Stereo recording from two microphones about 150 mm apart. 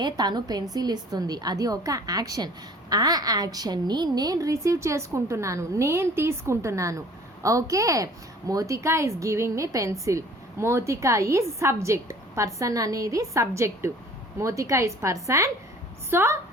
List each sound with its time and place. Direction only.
0.0 s a woman's voice: 30° right (ahead or behind)